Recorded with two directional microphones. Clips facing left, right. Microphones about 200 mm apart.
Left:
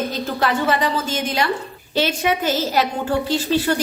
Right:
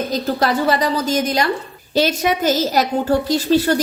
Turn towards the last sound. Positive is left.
turn(degrees=-40)  # may be behind; listen again after turning